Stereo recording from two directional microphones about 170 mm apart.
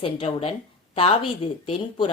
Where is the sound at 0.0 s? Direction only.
35° left (ahead or behind).